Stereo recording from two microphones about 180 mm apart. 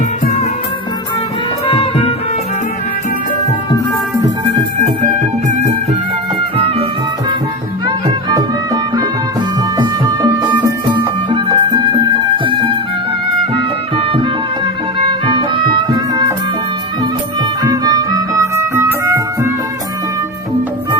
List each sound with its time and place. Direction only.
1.6 s music: 30° left (ahead or behind)
7.9 s music: 20° right (ahead or behind)
10.4 s music: 25° right (ahead or behind)
13.9 s music: 30° right (ahead or behind)
15.3 s music: 25° right (ahead or behind)
17.6 s music: 20° right (ahead or behind)